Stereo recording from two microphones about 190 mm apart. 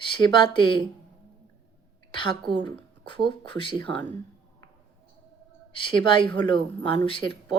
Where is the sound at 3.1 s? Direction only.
25° left (ahead or behind).